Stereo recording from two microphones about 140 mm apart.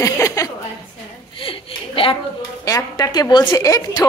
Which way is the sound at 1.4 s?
40° left (ahead or behind).